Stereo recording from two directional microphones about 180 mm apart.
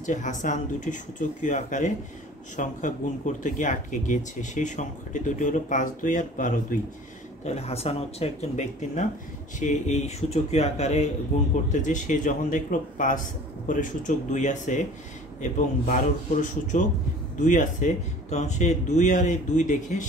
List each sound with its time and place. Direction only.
0.0 s speech: 45° left (ahead or behind)